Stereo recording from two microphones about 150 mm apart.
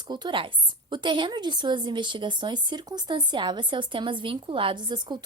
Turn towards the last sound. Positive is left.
turn(degrees=-30)  # may be behind; listen again after turning